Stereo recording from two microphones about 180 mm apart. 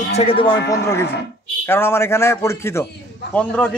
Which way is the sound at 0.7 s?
15° left (ahead or behind).